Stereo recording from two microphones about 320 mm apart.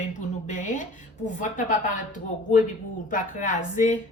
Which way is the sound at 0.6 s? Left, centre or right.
Left.